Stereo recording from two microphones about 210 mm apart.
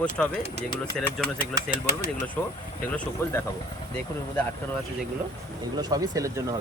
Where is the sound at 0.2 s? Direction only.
5° left (ahead or behind).